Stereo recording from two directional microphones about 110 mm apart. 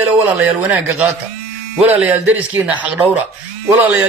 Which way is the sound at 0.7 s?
15° right (ahead or behind).